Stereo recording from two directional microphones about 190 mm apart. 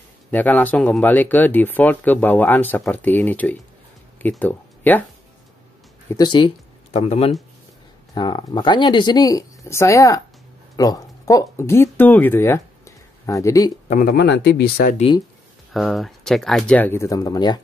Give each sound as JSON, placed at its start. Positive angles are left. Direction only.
{"t": 0.3, "sound": "speech", "side_deg": 10}
{"t": 6.1, "sound": "speech", "side_deg": 25}
{"t": 8.1, "sound": "speech", "side_deg": 25}
{"t": 13.8, "sound": "speech", "side_deg": 45}
{"t": 15.7, "sound": "speech", "side_deg": 0}